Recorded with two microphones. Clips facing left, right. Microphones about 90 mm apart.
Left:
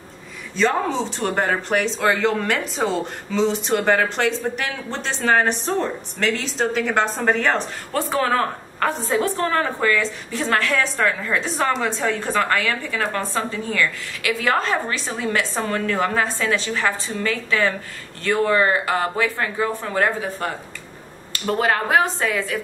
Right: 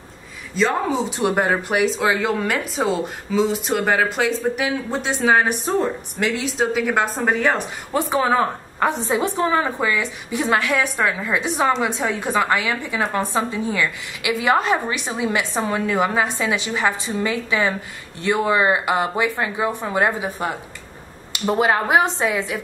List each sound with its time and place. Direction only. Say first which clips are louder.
0.6 s speech: even; 5° right (ahead or behind)